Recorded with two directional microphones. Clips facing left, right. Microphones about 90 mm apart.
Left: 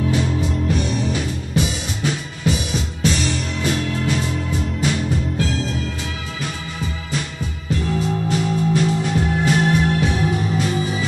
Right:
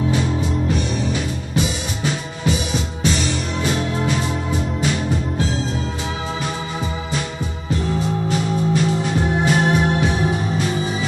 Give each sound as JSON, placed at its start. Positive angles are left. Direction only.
{"t": 9.3, "sound": "music", "side_deg": -20}